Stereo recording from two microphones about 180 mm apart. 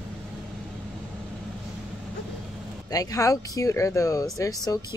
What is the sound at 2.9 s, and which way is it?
Speech, 20° left (ahead or behind).